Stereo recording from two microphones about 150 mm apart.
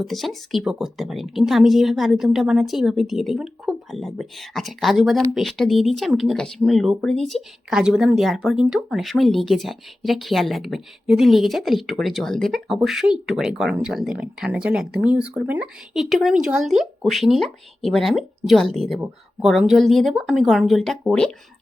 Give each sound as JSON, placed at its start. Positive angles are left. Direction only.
{"t": 0.0, "sound": "speech", "side_deg": 0}